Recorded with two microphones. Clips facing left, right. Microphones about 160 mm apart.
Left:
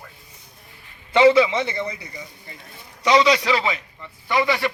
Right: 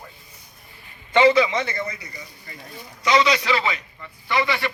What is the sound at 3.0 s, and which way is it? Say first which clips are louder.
Speech: left 2 dB; 35° left (ahead or behind).